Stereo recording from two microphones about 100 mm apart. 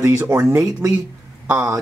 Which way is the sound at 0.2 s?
20° right (ahead or behind).